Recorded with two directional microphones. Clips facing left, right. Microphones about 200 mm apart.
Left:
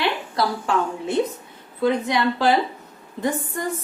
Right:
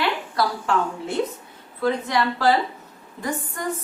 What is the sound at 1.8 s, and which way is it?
Speech, 20° left (ahead or behind).